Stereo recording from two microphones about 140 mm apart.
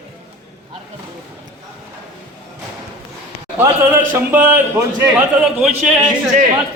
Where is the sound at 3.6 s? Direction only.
15° right (ahead or behind).